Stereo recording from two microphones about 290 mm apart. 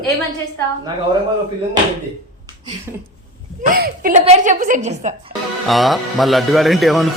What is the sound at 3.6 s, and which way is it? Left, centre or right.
A woman's voice, right.